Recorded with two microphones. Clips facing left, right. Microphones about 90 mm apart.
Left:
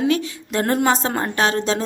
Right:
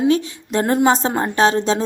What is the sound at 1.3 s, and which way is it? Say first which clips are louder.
Speech: right 5 dB; 25° right (ahead or behind).